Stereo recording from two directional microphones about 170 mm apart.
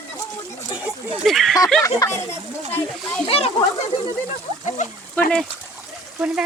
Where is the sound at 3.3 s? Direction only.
35° left (ahead or behind).